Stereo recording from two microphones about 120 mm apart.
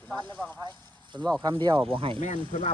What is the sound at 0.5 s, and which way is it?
Speech, 40° right (ahead or behind).